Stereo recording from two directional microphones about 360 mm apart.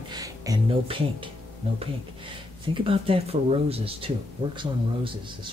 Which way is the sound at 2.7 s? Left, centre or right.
Centre.